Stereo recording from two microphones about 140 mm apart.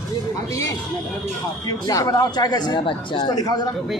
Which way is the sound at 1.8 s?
25° left (ahead or behind).